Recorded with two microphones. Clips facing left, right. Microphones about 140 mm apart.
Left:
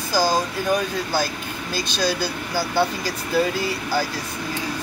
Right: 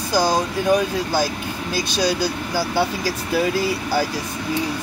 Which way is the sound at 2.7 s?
10° right (ahead or behind).